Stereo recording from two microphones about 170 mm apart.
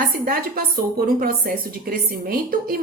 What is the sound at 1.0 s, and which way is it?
A woman's voice, 60° right (ahead or behind).